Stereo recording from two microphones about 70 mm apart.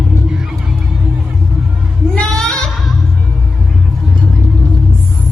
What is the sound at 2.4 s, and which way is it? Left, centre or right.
Music, centre.